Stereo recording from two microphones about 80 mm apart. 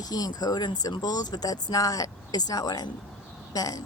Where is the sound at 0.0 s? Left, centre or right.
Left.